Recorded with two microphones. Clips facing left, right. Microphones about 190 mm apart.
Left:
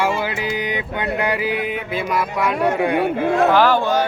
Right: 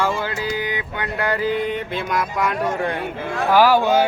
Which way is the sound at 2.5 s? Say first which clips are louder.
Left 4 dB; 65° left (ahead or behind).